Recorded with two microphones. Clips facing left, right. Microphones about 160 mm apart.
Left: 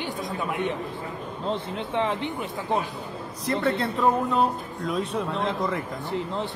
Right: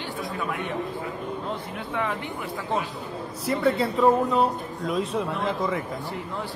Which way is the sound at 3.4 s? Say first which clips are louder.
Right 2 dB; centre (ahead or behind).